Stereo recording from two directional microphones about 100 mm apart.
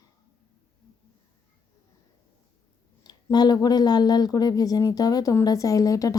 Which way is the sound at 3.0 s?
45° left (ahead or behind).